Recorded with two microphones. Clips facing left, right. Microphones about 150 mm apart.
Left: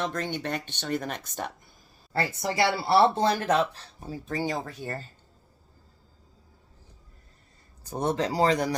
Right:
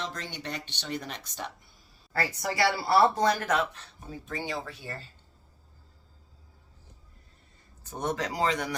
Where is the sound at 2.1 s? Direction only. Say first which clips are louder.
Left 2 dB; 25° left (ahead or behind); by 5.0 s 45° left (ahead or behind).